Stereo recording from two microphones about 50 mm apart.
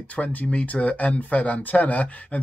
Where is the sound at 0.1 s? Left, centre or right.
Left.